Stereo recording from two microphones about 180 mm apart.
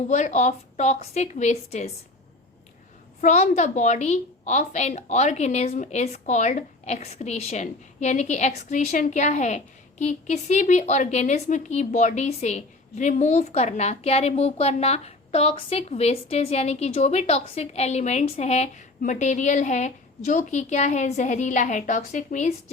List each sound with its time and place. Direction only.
0.1 s a woman's voice: 40° left (ahead or behind)
3.2 s a woman's voice: 40° left (ahead or behind)